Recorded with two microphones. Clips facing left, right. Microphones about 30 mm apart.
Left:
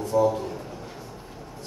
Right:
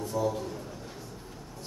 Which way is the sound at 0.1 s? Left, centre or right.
Centre.